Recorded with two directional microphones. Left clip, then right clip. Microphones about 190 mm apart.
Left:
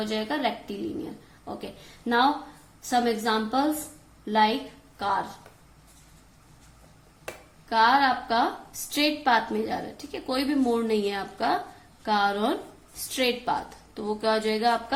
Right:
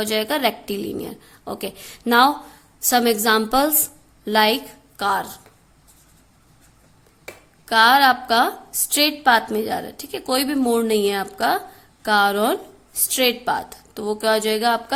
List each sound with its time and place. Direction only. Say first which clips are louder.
0.0 s speech: right 7 dB; 45° right (ahead or behind)
7.7 s a woman's voice: right 7 dB; 45° right (ahead or behind)